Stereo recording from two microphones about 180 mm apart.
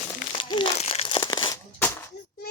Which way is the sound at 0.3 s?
30° left (ahead or behind).